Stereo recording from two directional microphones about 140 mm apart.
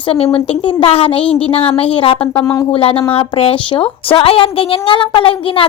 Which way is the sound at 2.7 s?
40° left (ahead or behind).